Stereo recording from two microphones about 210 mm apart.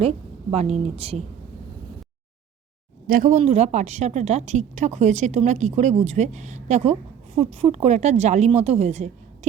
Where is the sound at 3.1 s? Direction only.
40° right (ahead or behind).